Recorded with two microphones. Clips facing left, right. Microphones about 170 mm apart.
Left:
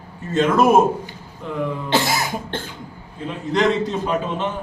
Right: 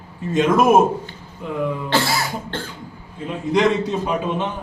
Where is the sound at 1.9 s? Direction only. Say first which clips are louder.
Left 3 dB; 15° left (ahead or behind).